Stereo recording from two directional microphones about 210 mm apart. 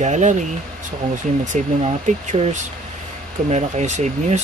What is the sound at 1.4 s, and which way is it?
Speech, 35° right (ahead or behind).